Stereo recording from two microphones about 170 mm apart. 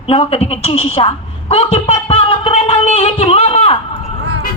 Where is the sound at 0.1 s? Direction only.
35° left (ahead or behind).